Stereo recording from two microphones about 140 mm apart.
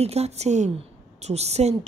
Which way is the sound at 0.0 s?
50° right (ahead or behind).